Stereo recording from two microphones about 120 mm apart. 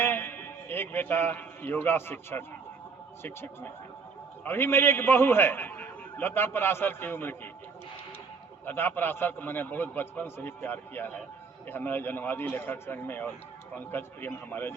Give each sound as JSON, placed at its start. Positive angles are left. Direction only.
{"t": 0.0, "sound": "a sound", "side_deg": 20}
{"t": 3.2, "sound": "a man's voice", "side_deg": 20}
{"t": 8.6, "sound": "a man's voice", "side_deg": 15}